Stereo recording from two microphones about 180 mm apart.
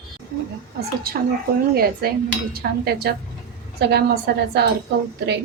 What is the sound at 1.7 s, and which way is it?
Dishes, 55° right (ahead or behind).